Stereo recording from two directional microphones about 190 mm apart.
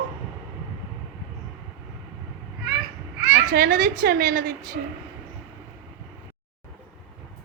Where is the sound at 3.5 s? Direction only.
50° right (ahead or behind).